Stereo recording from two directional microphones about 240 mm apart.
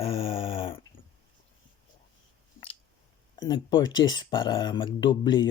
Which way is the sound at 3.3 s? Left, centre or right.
Centre.